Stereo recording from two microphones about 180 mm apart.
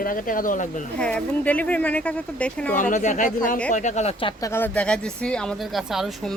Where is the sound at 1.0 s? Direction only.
5° left (ahead or behind).